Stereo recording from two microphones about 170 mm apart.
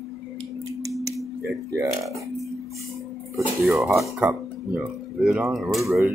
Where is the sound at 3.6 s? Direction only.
5° right (ahead or behind).